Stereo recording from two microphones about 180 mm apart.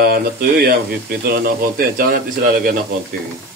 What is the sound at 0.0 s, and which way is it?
Speech, 60° right (ahead or behind).